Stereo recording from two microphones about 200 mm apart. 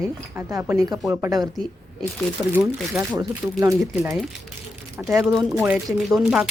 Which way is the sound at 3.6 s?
15° right (ahead or behind).